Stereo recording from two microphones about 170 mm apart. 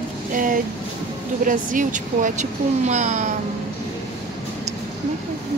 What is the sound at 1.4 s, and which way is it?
Speech, 50° right (ahead or behind).